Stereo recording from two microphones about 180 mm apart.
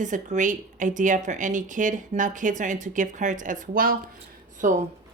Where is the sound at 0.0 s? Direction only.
45° right (ahead or behind).